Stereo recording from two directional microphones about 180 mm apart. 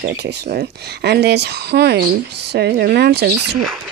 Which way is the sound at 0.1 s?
65° right (ahead or behind).